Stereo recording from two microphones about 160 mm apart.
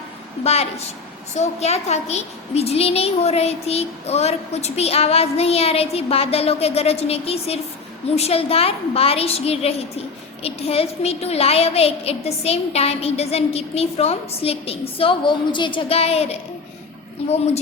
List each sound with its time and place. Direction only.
0.4 s a woman's voice: 40° left (ahead or behind)